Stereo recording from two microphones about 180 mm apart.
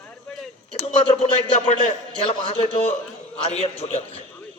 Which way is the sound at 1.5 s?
35° left (ahead or behind).